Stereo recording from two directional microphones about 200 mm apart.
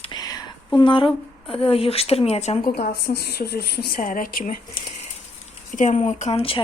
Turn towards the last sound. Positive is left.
turn(degrees=30)  # may be behind; listen again after turning